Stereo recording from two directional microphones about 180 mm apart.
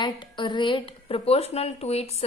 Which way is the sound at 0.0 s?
25° left (ahead or behind).